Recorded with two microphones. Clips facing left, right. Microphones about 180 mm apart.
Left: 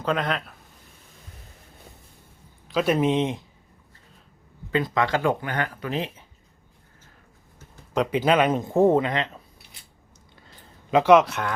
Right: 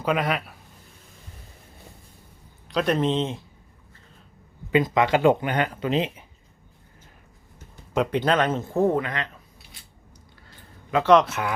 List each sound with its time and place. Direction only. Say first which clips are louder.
0.0 s speech: right 1 dB; 10° right (ahead or behind)
2.6 s speech: left 1 dB; 5° left (ahead or behind)
4.7 s speech: right 3 dB; 15° right (ahead or behind)
7.9 s speech: left 1 dB; 5° left (ahead or behind); by 9.3 s 25° left (ahead or behind)
10.9 s speech: left 1 dB; 10° left (ahead or behind)